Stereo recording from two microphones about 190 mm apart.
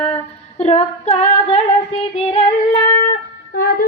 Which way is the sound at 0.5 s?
35° left (ahead or behind).